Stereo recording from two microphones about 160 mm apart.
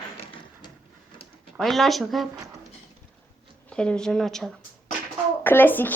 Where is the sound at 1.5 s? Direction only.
Centre (ahead or behind).